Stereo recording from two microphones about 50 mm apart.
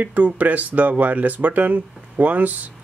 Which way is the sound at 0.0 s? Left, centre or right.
Right.